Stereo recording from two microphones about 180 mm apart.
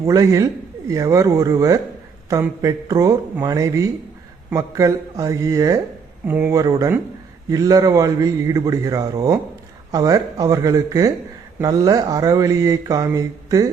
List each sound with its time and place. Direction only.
0.0 s speech: 15° right (ahead or behind)
7.5 s mantra: 20° right (ahead or behind)